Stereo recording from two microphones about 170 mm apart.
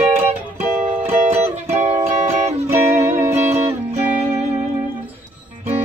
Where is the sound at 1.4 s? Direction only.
40° right (ahead or behind).